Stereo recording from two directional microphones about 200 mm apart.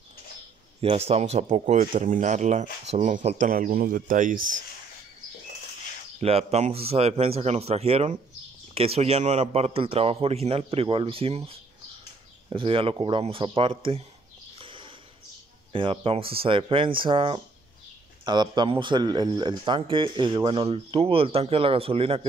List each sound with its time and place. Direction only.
0.7 s speech: 30° right (ahead or behind)
6.1 s speech: 30° right (ahead or behind)
14.6 s a sound: 25° right (ahead or behind)
15.7 s speech: 25° right (ahead or behind)